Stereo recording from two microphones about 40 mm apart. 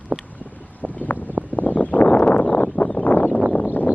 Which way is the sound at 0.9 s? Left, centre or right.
Left.